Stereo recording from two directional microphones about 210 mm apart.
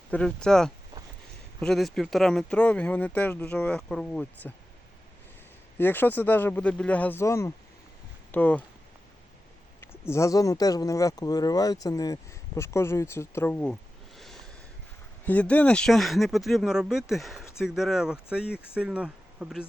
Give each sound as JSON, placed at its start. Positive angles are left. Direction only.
{"t": 0.1, "sound": "speech", "side_deg": 5}
{"t": 5.7, "sound": "speech", "side_deg": 10}
{"t": 10.1, "sound": "speech", "side_deg": 15}
{"t": 14.2, "sound": "a sound", "side_deg": 0}
{"t": 15.2, "sound": "speech", "side_deg": 5}